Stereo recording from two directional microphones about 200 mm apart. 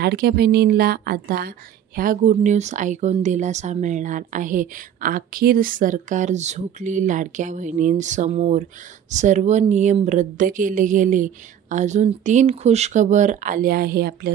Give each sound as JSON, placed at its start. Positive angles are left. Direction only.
{"t": 0.0, "sound": "a woman's voice", "side_deg": -55}